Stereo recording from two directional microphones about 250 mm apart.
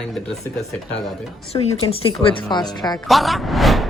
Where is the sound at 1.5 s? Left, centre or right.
Left.